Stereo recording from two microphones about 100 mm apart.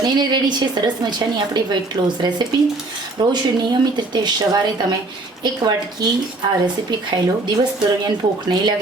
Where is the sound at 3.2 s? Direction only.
45° right (ahead or behind).